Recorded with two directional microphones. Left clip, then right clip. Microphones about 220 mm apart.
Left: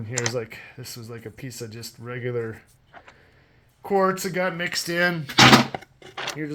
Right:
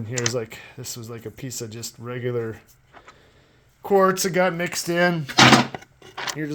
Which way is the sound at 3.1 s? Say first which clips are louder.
Right 2 dB; 20° right (ahead or behind).